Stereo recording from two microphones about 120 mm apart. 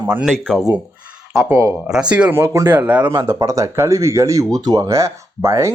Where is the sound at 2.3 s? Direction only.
20° right (ahead or behind).